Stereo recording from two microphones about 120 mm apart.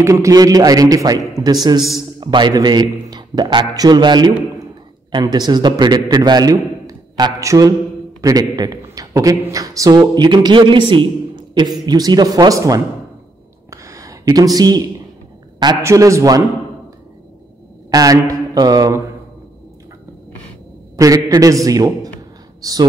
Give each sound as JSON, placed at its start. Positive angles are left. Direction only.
{"t": 0.0, "sound": "a man's voice", "side_deg": -30}
{"t": 13.7, "sound": "a sound", "side_deg": -25}
{"t": 14.2, "sound": "a man's voice", "side_deg": -30}
{"t": 17.9, "sound": "a man's voice", "side_deg": -30}
{"t": 20.9, "sound": "a man's voice", "side_deg": -30}